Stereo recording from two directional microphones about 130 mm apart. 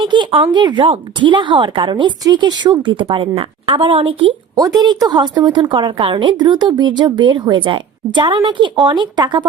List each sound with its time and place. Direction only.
0.0 s a woman's voice: 40° right (ahead or behind)
4.5 s a woman's voice: 30° right (ahead or behind)